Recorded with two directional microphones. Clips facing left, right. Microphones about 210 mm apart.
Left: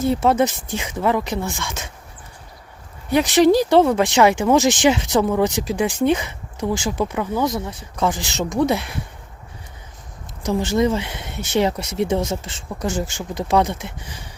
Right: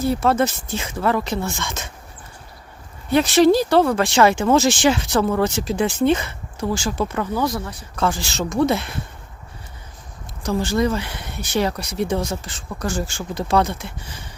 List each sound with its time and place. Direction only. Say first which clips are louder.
0.0 s speech: left 1 dB; 20° left (ahead or behind)
3.1 s speech: even; 15° left (ahead or behind)
10.4 s speech: left 1 dB; 20° left (ahead or behind)